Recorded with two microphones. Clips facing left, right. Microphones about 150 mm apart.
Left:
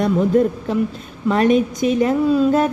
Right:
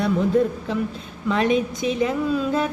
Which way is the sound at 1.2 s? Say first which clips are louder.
Left 5 dB; 45° left (ahead or behind).